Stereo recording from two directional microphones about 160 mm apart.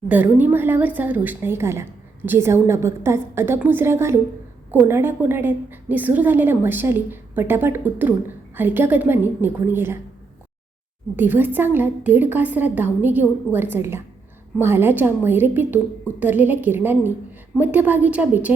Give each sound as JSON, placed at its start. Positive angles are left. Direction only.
{"t": 0.1, "sound": "a woman's voice", "side_deg": -10}
{"t": 11.2, "sound": "a woman's voice", "side_deg": -10}